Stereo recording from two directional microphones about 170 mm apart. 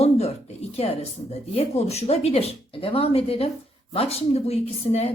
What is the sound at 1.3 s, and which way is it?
A woman's voice, 40° left (ahead or behind).